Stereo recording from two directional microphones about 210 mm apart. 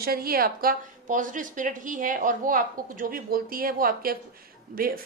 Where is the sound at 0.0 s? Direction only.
45° right (ahead or behind).